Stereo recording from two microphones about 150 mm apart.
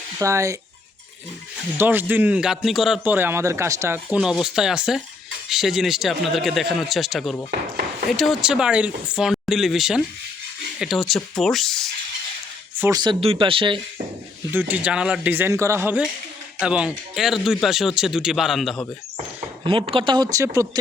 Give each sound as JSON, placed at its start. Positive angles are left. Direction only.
{"t": 0.2, "sound": "speech", "side_deg": -20}
{"t": 1.8, "sound": "a man's voice", "side_deg": -15}
{"t": 4.2, "sound": "speech", "side_deg": -5}
{"t": 12.8, "sound": "speech", "side_deg": -25}
{"t": 14.5, "sound": "a man's voice", "side_deg": -10}
{"t": 19.6, "sound": "speech", "side_deg": -35}